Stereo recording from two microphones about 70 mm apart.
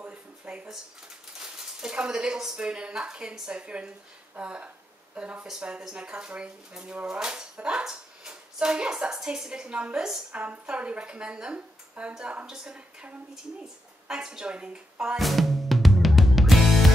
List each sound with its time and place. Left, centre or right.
0.0 s a sound: centre
1.4 s speech: centre
15.1 s music: centre